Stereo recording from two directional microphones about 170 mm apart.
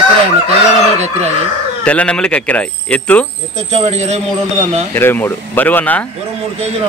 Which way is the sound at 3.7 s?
40° right (ahead or behind).